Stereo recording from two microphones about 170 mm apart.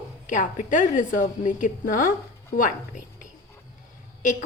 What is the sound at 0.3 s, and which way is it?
A woman's voice, 50° left (ahead or behind).